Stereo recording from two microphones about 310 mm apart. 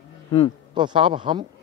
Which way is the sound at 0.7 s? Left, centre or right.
Centre.